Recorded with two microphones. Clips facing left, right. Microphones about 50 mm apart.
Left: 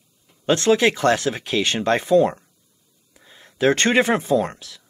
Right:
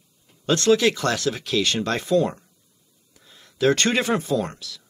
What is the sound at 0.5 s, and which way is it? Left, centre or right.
Speech, left.